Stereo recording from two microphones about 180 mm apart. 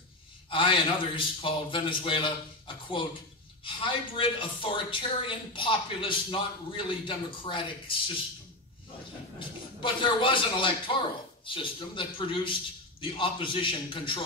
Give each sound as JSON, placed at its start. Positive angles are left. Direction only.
{"t": 0.5, "sound": "speech", "side_deg": 30}
{"t": 9.4, "sound": "speech", "side_deg": 25}